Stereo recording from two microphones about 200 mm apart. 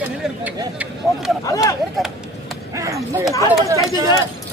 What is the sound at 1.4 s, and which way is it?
Speech, 15° left (ahead or behind).